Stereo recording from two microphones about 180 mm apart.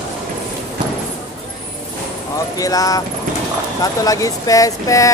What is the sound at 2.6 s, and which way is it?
Speech, 20° left (ahead or behind).